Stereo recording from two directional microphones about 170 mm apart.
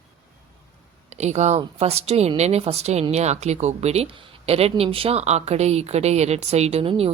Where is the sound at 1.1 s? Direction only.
40° right (ahead or behind).